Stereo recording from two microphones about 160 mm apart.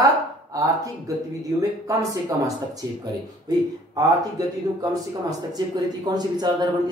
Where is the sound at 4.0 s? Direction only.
25° right (ahead or behind).